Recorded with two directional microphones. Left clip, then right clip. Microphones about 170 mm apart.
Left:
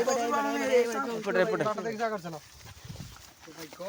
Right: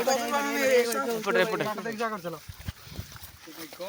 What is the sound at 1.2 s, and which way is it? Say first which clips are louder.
Speech: even; 35° left (ahead or behind).